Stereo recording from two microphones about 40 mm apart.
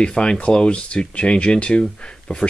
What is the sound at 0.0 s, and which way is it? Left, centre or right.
Speech, left.